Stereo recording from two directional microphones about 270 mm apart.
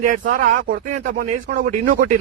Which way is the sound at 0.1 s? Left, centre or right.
Right.